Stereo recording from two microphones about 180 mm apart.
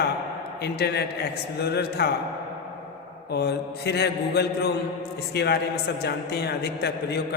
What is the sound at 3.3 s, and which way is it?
A man's voice, 65° left (ahead or behind).